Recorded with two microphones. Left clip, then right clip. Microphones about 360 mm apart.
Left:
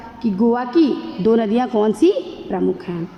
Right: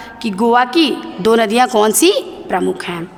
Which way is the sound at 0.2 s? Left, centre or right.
Right.